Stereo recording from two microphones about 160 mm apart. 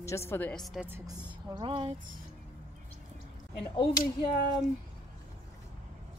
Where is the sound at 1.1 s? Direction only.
30° right (ahead or behind).